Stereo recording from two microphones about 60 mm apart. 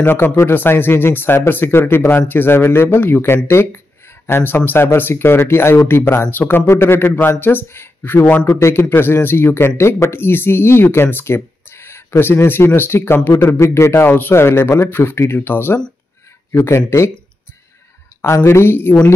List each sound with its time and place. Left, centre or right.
0.0 s speech: left
6.7 s speech: left
13.6 s speech: left
14.0 s speech: left
14.9 s speech: left
18.2 s speech: left